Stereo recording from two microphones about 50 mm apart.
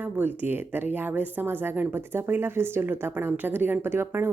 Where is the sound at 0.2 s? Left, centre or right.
Right.